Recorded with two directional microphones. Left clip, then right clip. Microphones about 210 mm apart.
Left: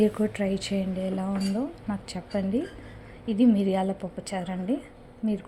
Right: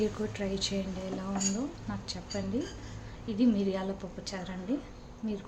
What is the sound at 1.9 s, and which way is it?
Speech, 25° left (ahead or behind).